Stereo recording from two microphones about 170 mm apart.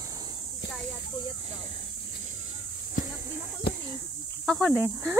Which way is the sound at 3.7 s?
75° left (ahead or behind).